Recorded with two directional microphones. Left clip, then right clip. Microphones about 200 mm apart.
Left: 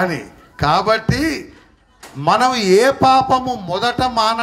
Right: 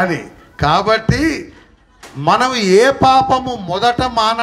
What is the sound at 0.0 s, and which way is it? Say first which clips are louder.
A man's voice: right 3 dB; 25° left (ahead or behind).